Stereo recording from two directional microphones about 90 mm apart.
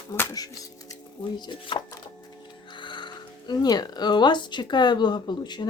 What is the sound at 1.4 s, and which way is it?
Speech, 60° left (ahead or behind).